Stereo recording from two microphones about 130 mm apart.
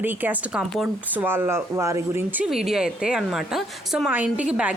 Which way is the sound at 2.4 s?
5° right (ahead or behind).